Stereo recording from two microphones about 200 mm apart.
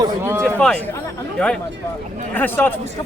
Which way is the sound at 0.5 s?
5° left (ahead or behind).